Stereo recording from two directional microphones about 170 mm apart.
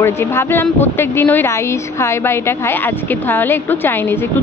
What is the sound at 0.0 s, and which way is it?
A woman's voice, 15° left (ahead or behind).